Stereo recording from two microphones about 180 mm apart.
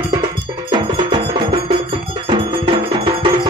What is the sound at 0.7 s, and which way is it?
Music, 25° right (ahead or behind).